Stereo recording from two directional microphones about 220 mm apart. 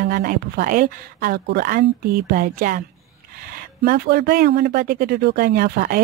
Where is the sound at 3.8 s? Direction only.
45° right (ahead or behind).